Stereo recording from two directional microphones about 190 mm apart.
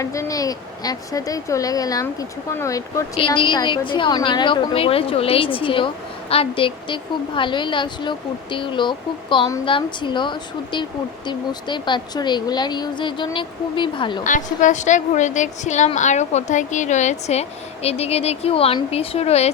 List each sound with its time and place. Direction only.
0.0 s a woman's voice: 15° left (ahead or behind)
14.3 s a woman's voice: 40° left (ahead or behind)